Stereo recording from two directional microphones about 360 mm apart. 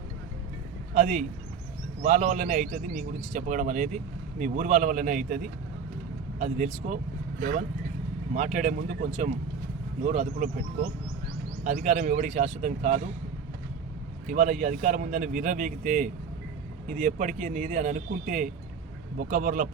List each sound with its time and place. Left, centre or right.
0.9 s a man's voice: right
8.3 s a man's voice: right
11.6 s a man's voice: right
14.3 s a man's voice: right